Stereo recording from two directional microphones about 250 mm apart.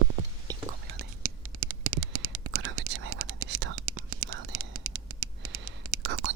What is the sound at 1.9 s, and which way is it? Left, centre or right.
Whispering, right.